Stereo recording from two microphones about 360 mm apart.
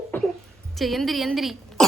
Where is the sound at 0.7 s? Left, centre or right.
Centre.